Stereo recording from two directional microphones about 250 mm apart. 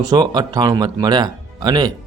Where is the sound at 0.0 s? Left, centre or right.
Centre.